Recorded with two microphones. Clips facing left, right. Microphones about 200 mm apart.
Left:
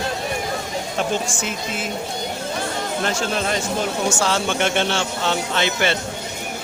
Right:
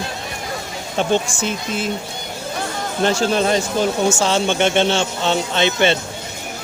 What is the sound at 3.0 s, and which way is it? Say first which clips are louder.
Speech: right 8 dB; 30° right (ahead or behind).